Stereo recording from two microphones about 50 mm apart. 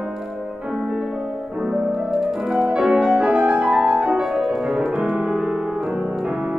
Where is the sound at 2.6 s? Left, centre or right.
Right.